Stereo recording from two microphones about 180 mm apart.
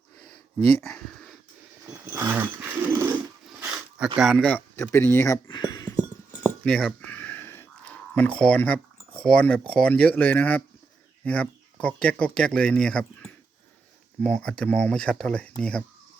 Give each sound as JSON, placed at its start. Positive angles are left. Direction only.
{"t": 2.0, "sound": "speech", "side_deg": -10}
{"t": 4.2, "sound": "speech", "side_deg": 0}
{"t": 6.4, "sound": "a sound", "side_deg": 10}
{"t": 7.1, "sound": "speech", "side_deg": 10}